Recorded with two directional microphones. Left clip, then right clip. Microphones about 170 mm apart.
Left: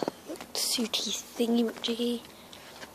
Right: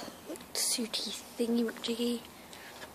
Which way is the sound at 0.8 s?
20° left (ahead or behind).